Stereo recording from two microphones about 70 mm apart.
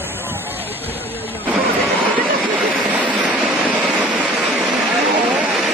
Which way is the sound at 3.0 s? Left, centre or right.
Right.